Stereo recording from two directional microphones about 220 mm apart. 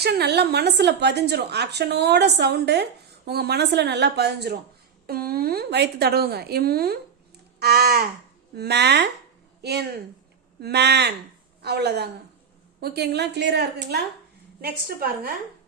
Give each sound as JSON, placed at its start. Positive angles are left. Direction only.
{"t": 0.0, "sound": "a woman's voice", "side_deg": -45}